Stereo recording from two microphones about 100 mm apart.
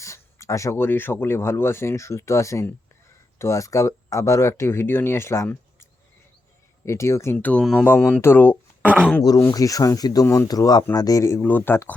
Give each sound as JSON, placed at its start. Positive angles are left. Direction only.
{"t": 0.0, "sound": "speech", "side_deg": 30}
{"t": 6.8, "sound": "speech", "side_deg": 30}
{"t": 7.3, "sound": "speech", "side_deg": 10}
{"t": 8.2, "sound": "speech", "side_deg": 20}
{"t": 8.8, "sound": "speech", "side_deg": -15}
{"t": 9.5, "sound": "speech", "side_deg": 35}
{"t": 10.2, "sound": "speech", "side_deg": 25}
{"t": 10.5, "sound": "speech", "side_deg": 40}